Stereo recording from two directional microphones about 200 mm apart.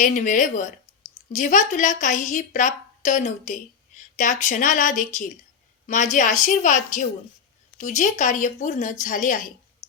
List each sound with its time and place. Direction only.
0.0 s a woman's voice: 40° left (ahead or behind)